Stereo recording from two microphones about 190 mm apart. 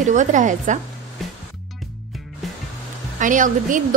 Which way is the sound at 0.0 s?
40° right (ahead or behind).